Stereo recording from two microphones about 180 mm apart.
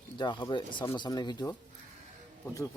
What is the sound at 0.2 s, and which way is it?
Speech, 25° left (ahead or behind).